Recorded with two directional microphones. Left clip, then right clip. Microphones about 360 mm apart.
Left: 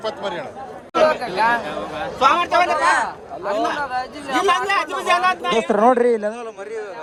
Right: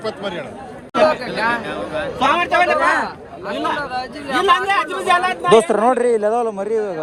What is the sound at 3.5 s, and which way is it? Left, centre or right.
Speech, left.